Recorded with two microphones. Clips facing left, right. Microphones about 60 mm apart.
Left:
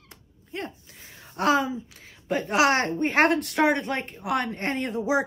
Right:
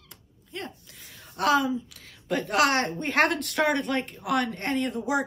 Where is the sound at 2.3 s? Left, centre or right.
Centre.